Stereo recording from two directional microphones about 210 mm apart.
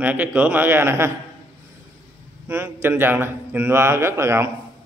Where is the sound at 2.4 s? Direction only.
10° right (ahead or behind).